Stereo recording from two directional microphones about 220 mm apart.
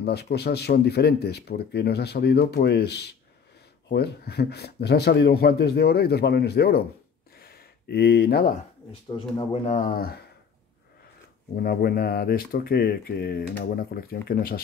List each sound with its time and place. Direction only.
0.0 s speech: 50° left (ahead or behind)
7.3 s gasp: 45° left (ahead or behind)
9.4 s speech: 30° left (ahead or behind)
11.6 s speech: 45° left (ahead or behind)